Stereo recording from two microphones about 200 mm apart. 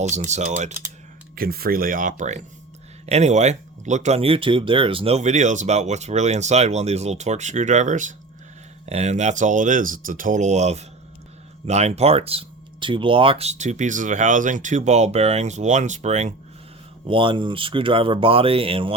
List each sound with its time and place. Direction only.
0.0 s speech: 35° right (ahead or behind)
1.4 s speech: 50° right (ahead or behind); by 18.9 s 30° right (ahead or behind)